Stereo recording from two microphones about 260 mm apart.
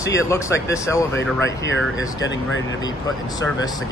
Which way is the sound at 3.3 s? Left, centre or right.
Centre.